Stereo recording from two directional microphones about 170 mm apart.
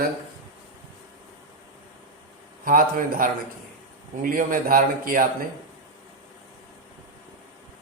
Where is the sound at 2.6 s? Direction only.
55° right (ahead or behind).